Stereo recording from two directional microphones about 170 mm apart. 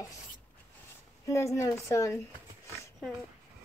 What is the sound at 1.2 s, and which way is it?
Speech, 15° left (ahead or behind).